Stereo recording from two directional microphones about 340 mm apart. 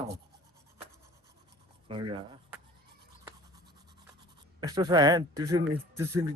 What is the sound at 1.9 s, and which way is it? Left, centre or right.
Speech, centre.